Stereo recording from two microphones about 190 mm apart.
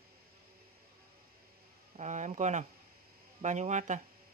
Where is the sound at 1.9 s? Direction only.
40° right (ahead or behind).